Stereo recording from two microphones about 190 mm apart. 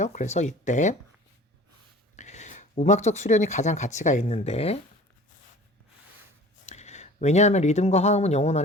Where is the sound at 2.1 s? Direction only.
40° left (ahead or behind).